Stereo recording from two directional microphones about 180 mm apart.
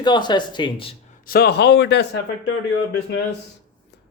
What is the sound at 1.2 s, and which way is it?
Speech, 55° left (ahead or behind).